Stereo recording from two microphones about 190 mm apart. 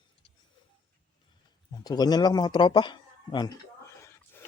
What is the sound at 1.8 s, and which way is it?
Speech, 20° left (ahead or behind).